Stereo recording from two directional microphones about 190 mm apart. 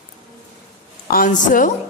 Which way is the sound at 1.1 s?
45° left (ahead or behind).